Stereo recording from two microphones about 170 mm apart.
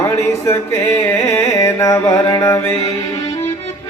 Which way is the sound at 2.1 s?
30° left (ahead or behind).